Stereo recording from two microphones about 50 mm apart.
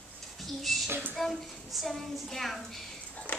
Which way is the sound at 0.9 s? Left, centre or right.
Right.